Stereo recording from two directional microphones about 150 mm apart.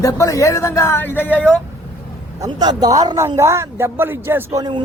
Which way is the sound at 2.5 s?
25° right (ahead or behind).